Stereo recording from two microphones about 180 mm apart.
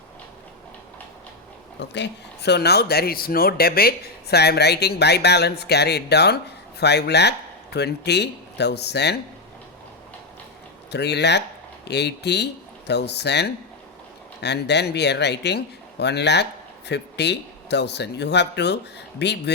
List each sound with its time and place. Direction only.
1.9 s speech: 70° left (ahead or behind)
10.9 s speech: 70° left (ahead or behind)